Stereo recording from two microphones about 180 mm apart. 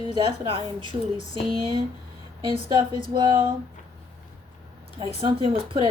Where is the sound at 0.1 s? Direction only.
30° right (ahead or behind).